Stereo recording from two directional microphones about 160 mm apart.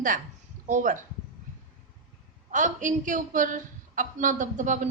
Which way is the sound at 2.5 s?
50° right (ahead or behind).